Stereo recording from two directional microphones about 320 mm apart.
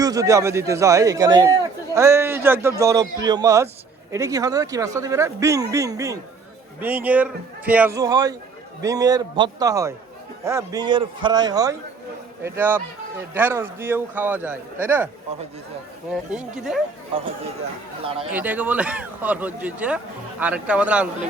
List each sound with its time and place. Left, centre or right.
0.0 s a man's voice: centre
16.3 s speech: centre
18.0 s a man's voice: centre
18.3 s speech: centre